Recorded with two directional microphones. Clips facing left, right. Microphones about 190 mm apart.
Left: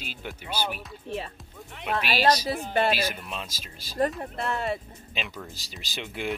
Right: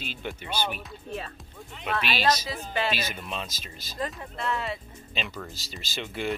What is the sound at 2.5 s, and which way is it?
Speech, 55° left (ahead or behind).